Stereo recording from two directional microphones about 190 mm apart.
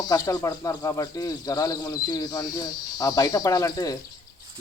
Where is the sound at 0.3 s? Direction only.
20° left (ahead or behind).